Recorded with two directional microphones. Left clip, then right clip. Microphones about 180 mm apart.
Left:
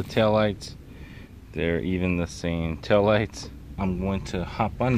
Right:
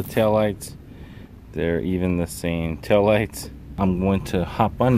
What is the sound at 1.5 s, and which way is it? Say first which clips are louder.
Speech: right 3 dB; 5° right (ahead or behind).